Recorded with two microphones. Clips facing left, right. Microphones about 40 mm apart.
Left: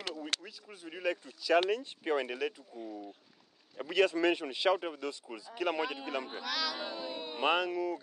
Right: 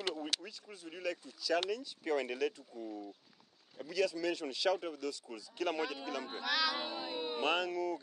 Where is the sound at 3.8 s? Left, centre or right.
Left.